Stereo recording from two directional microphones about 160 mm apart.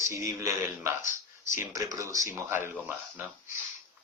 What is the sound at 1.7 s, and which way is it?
Speech, 20° right (ahead or behind).